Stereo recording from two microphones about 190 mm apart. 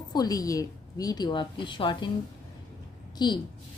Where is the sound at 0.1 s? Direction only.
20° left (ahead or behind).